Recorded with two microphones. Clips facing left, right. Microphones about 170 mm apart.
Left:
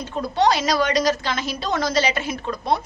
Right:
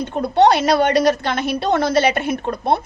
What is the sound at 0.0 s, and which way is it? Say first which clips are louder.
A woman's voice: right 6 dB; 60° right (ahead or behind).